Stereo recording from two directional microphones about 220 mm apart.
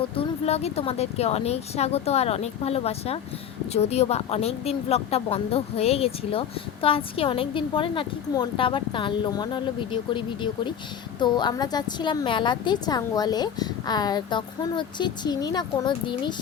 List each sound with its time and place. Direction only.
0.2 s a woman's voice: 30° left (ahead or behind)